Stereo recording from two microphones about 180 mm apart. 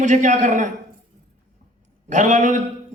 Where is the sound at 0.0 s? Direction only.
40° right (ahead or behind).